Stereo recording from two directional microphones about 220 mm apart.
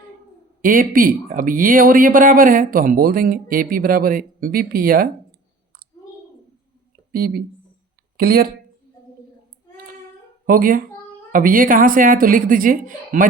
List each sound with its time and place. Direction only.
0.6 s speech: 40° right (ahead or behind)
7.1 s speech: 45° right (ahead or behind)
10.4 s a woman's voice: 40° right (ahead or behind)